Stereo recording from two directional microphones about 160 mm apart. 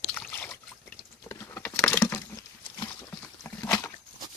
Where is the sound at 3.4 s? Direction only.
10° left (ahead or behind).